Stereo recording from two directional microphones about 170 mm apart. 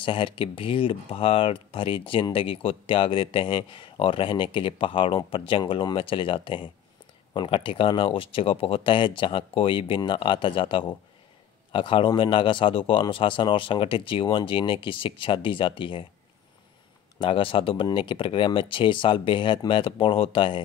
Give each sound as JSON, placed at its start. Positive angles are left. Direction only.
{"t": 0.0, "sound": "speech", "side_deg": 30}
{"t": 17.2, "sound": "speech", "side_deg": 30}